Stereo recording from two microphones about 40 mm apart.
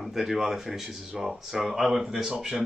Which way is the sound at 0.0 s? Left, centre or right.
Centre.